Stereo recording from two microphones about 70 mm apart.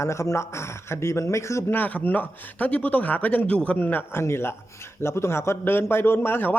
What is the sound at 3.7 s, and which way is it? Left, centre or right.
A man's voice, left.